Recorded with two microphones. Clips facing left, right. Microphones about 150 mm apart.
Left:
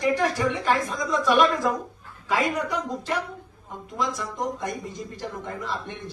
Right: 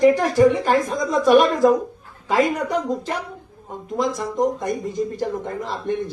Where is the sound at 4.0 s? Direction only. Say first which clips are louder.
Right 7 dB; 45° right (ahead or behind).